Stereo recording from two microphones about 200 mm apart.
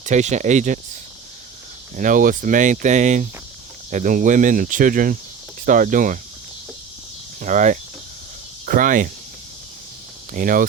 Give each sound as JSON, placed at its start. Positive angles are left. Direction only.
{"t": 0.0, "sound": "speech", "side_deg": -35}
{"t": 2.0, "sound": "speech", "side_deg": -40}
{"t": 7.4, "sound": "speech", "side_deg": -40}
{"t": 10.3, "sound": "speech", "side_deg": -45}